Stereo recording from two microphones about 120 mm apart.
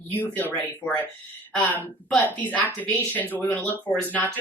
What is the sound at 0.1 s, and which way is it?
Speech, 15° left (ahead or behind).